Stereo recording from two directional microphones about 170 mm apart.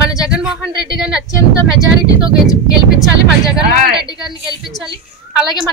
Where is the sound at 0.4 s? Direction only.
5° right (ahead or behind).